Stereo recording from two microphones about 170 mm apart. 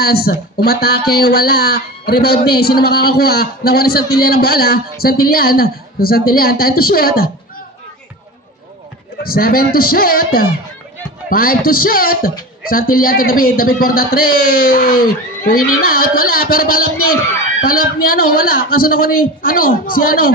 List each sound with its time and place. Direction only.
0.0 s speech: 65° left (ahead or behind)
9.2 s speech: 60° left (ahead or behind)